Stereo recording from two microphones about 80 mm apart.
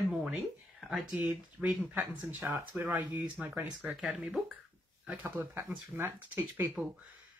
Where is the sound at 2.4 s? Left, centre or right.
Right.